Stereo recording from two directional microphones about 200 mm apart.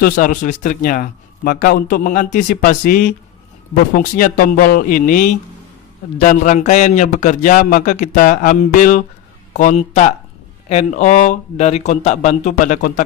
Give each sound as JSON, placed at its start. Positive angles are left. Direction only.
{"t": 0.0, "sound": "a man's voice", "side_deg": 40}